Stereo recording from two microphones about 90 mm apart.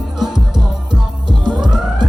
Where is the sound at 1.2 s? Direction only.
55° right (ahead or behind).